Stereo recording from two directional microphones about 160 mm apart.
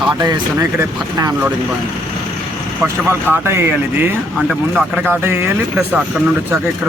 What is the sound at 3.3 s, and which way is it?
Speech, 15° right (ahead or behind).